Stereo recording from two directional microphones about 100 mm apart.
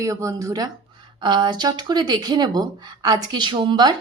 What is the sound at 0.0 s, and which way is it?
Speech, 35° right (ahead or behind).